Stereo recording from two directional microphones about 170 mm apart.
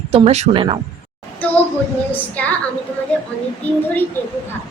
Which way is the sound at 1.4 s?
10° left (ahead or behind).